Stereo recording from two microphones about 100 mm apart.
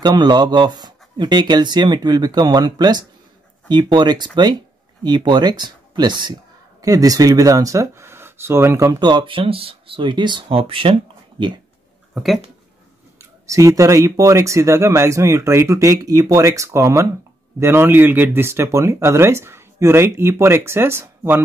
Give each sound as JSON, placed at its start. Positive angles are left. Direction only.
{"t": 0.0, "sound": "speech", "side_deg": -45}
{"t": 6.8, "sound": "speech", "side_deg": -35}
{"t": 9.0, "sound": "speech", "side_deg": -55}
{"t": 10.6, "sound": "speech", "side_deg": -65}
{"t": 12.1, "sound": "speech", "side_deg": 0}
{"t": 13.2, "sound": "speech", "side_deg": -30}